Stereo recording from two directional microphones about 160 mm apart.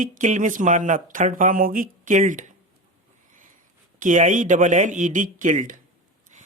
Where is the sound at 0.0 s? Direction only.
55° right (ahead or behind).